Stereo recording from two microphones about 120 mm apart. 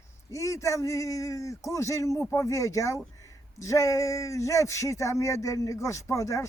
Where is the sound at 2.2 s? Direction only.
25° left (ahead or behind).